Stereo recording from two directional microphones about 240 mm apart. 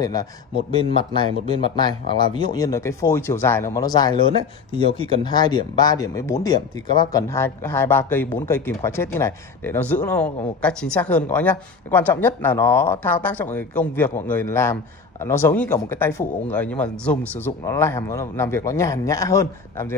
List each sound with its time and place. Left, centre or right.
0.0 s speech: centre
5.2 s speech: centre